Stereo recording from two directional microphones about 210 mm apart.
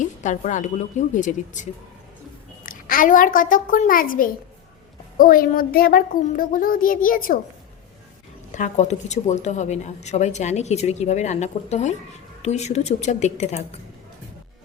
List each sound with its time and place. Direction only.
0.0 s a woman's voice: 35° left (ahead or behind)
2.6 s a child's voice: 40° left (ahead or behind)
8.5 s a woman's voice: 35° left (ahead or behind)